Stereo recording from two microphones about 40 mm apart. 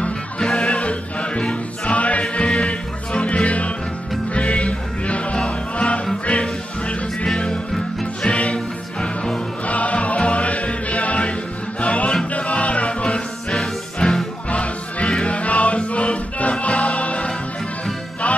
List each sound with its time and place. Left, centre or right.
0.4 s music: left
7.7 s music: centre
8.3 s music: left
9.7 s music: left